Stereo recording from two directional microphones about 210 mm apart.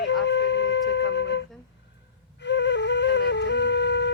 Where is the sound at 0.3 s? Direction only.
55° left (ahead or behind).